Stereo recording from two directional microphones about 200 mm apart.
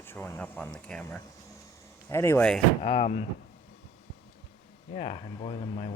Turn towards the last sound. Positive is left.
turn(degrees=30)  # may be behind; listen again after turning